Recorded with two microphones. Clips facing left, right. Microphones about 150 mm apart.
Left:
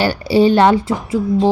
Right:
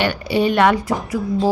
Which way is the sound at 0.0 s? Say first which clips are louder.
Left 5 dB; 35° left (ahead or behind).